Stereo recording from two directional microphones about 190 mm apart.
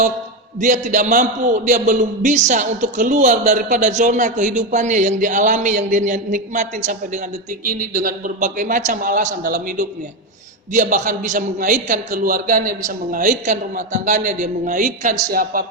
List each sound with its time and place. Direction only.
0.6 s a man's voice: 40° right (ahead or behind)